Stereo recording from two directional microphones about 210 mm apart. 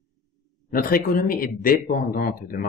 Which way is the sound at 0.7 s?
45° left (ahead or behind).